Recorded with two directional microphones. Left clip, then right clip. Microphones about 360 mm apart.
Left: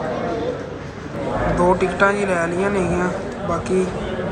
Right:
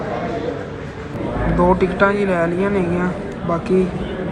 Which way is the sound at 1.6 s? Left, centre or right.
Centre.